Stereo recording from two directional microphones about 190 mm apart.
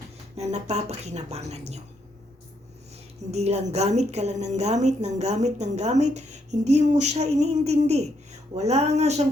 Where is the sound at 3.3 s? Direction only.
35° right (ahead or behind).